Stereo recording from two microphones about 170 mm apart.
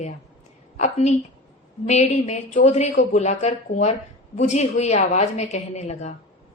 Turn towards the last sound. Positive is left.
turn(degrees=40)  # may be behind; listen again after turning